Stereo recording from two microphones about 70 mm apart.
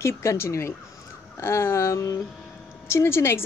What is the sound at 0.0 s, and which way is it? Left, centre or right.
A woman's voice, left.